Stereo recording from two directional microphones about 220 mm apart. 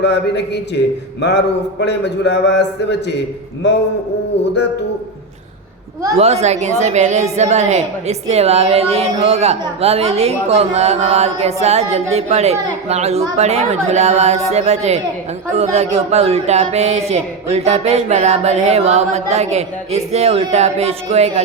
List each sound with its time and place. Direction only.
0.0 s a man's voice: 50° left (ahead or behind)
1.8 s a man's voice: 50° left (ahead or behind)
6.1 s a woman's voice: 30° right (ahead or behind)